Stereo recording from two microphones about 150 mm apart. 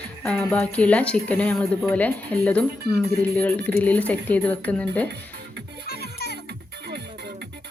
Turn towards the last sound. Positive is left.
turn(degrees=90)